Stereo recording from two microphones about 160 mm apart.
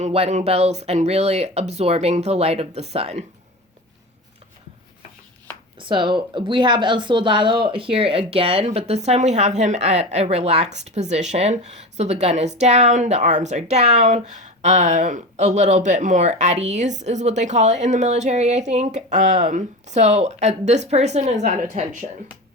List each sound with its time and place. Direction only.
0.0 s speech: 40° right (ahead or behind)
5.8 s speech: 30° right (ahead or behind)